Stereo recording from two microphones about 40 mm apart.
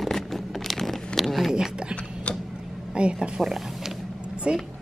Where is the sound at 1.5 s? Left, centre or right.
Right.